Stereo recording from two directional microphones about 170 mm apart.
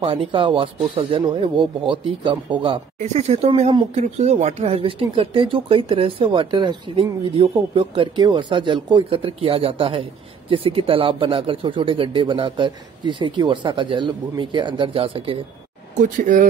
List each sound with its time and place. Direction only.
0.0 s speech: 30° right (ahead or behind)
3.0 s speech: 40° right (ahead or behind)
16.0 s speech: 50° right (ahead or behind)